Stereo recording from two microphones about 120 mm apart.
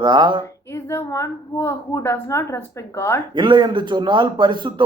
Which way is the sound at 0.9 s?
25° left (ahead or behind).